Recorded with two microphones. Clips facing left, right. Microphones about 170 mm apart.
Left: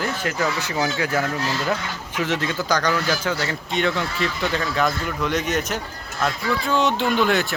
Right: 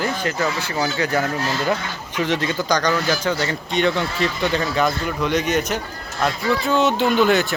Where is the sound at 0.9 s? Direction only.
5° left (ahead or behind).